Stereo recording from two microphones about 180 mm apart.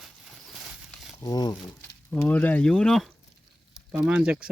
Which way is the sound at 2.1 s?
10° left (ahead or behind).